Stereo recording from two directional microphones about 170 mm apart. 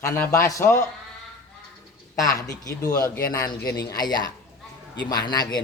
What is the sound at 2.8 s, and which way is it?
Speech, 20° left (ahead or behind).